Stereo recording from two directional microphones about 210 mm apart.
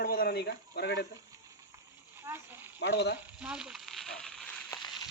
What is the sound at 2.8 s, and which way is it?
Speech, 50° left (ahead or behind).